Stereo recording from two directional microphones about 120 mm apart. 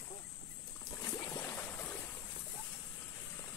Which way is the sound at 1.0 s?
30° left (ahead or behind).